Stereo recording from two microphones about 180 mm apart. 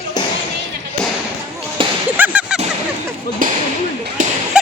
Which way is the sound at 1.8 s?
30° right (ahead or behind).